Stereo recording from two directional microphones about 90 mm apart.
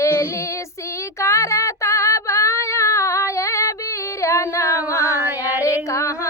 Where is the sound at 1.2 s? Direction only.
35° left (ahead or behind).